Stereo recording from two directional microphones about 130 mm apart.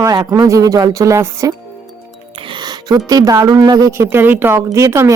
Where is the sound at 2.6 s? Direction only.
30° right (ahead or behind).